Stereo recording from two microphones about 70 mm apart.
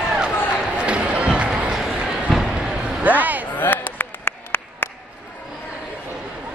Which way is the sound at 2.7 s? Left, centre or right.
Centre.